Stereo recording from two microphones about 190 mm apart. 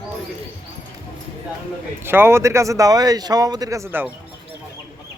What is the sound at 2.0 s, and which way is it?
A man's voice, 10° right (ahead or behind).